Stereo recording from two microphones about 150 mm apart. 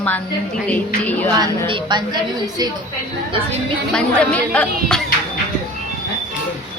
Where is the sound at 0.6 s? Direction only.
10° left (ahead or behind).